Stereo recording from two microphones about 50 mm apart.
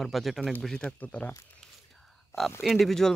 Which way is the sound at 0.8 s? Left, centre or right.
Left.